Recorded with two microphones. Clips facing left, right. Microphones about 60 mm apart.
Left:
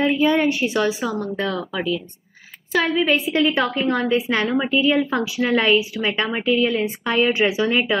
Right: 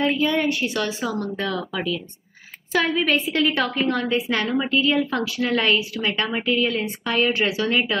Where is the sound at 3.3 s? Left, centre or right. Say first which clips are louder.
Left 2 dB; left.